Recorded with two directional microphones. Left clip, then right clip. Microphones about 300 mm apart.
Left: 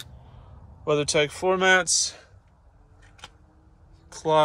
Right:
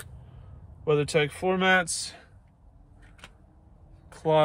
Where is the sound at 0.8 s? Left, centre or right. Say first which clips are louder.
Left 2 dB; centre.